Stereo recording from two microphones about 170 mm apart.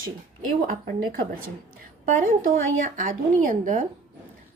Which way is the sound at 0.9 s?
60° right (ahead or behind).